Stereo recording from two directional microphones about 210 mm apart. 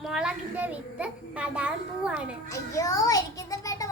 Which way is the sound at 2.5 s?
15° left (ahead or behind).